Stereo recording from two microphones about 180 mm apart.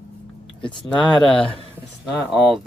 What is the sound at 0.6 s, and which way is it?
Speech, 25° left (ahead or behind).